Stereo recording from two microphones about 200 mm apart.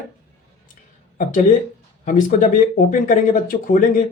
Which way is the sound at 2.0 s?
40° left (ahead or behind).